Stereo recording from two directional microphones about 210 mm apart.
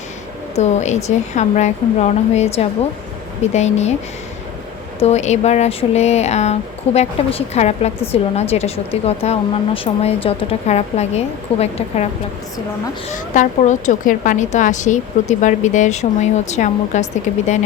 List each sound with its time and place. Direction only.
0.5 s speech: 35° left (ahead or behind)
4.9 s speech: 30° left (ahead or behind)
13.1 s speech: 35° left (ahead or behind)